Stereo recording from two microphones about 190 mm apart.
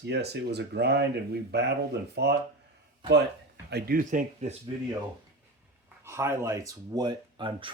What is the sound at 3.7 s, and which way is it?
Speech, 55° right (ahead or behind).